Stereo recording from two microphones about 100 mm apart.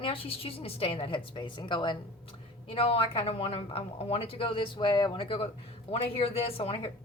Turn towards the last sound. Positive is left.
turn(degrees=65)  # may be behind; listen again after turning